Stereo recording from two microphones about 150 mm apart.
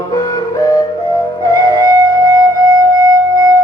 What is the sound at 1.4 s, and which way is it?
Music, 25° left (ahead or behind).